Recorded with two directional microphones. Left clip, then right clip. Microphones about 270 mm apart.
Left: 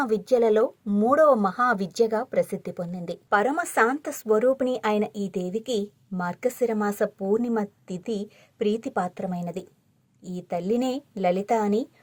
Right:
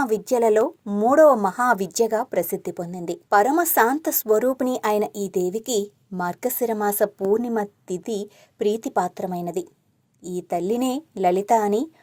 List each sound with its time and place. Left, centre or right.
0.0 s speech: centre